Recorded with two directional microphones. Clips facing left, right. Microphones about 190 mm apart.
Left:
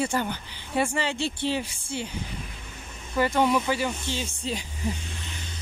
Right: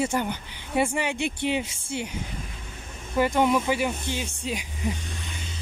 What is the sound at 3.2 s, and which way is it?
Speech, 15° right (ahead or behind).